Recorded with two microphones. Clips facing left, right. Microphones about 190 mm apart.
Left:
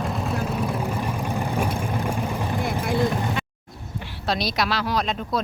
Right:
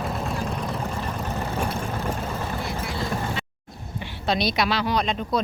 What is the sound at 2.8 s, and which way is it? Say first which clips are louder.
Vehicle: left 8 dB; 50° left (ahead or behind).